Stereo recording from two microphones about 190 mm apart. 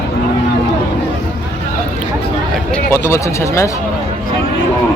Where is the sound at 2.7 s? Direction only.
15° left (ahead or behind).